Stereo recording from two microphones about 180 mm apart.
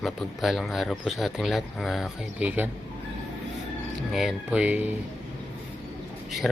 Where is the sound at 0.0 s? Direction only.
Centre (ahead or behind).